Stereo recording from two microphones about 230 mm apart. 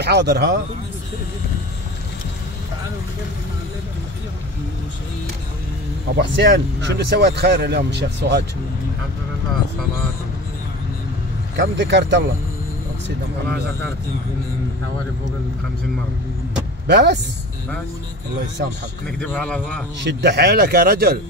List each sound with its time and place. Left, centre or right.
0.0 s speech: right
6.1 s speech: right
11.5 s speech: right
16.8 s speech: right
18.6 s speech: right
19.1 s speech: centre
20.0 s speech: right